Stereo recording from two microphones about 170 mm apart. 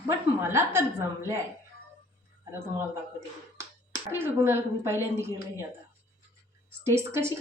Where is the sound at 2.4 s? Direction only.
15° right (ahead or behind).